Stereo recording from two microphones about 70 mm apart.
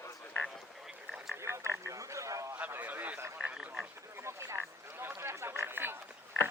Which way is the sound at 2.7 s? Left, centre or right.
Right.